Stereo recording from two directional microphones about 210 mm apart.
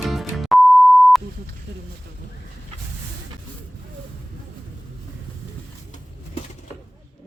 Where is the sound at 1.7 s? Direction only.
60° right (ahead or behind).